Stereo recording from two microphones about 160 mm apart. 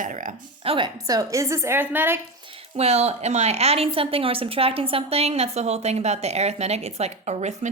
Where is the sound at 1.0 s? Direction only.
20° right (ahead or behind).